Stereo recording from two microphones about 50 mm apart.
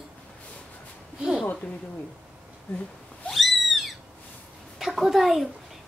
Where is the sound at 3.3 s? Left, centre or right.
Centre.